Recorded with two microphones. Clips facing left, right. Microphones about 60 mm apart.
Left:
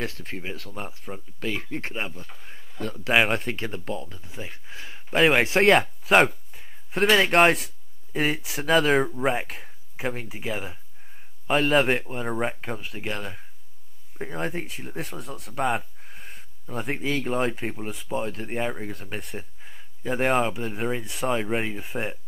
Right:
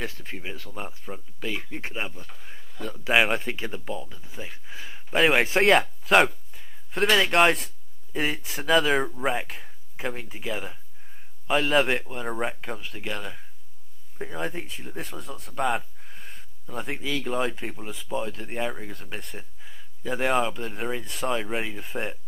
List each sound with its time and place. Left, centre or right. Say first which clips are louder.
0.0 s speech: left 2 dB; centre
14.4 s speech: left 2 dB; centre
15.5 s a sound: left 1 dB; centre
17.1 s speech: left 1 dB; centre
19.6 s speech: left 1 dB; centre